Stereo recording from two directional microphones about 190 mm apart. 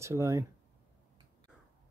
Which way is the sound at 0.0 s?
15° right (ahead or behind).